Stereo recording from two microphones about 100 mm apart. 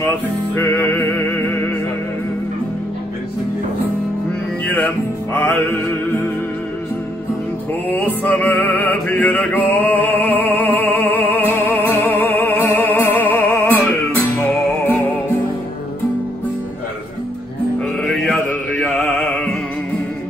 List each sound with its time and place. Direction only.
0.6 s music: 15° left (ahead or behind)
4.6 s music: 20° left (ahead or behind)
7.9 s music: 20° left (ahead or behind)
18.0 s mantra: 5° left (ahead or behind)
18.8 s music: 10° left (ahead or behind)